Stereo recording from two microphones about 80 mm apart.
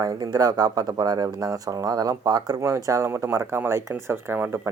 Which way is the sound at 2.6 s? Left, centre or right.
Right.